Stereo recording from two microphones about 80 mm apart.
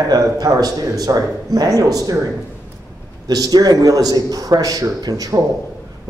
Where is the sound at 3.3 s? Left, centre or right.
Right.